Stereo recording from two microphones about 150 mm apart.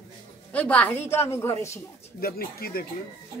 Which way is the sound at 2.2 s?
90° left.